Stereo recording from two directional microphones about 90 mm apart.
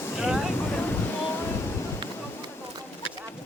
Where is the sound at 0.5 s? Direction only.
25° left (ahead or behind).